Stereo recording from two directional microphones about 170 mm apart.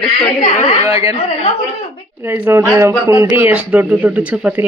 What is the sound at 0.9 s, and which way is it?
Speech, 15° right (ahead or behind).